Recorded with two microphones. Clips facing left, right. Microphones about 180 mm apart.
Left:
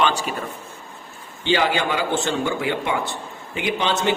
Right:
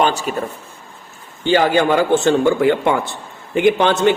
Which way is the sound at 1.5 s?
45° right (ahead or behind).